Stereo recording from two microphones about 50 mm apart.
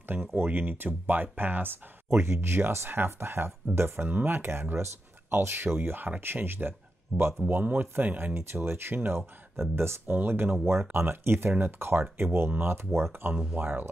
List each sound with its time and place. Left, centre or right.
0.4 s speech: right
4.1 s speech: right
7.1 s speech: centre
7.4 s speech: right
8.4 s speech: right
12.7 s speech: right
13.6 s speech: right